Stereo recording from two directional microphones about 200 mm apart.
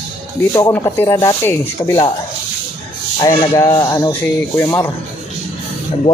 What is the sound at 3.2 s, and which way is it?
Speech, 20° left (ahead or behind).